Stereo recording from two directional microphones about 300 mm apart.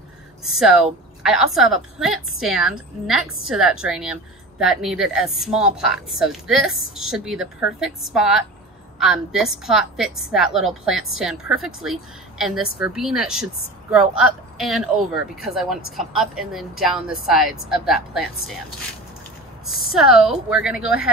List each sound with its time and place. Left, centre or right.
0.4 s a woman's voice: centre
19.7 s a woman's voice: centre